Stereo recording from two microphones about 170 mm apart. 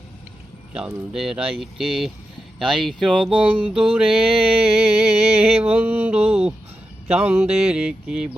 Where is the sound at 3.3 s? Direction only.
30° right (ahead or behind).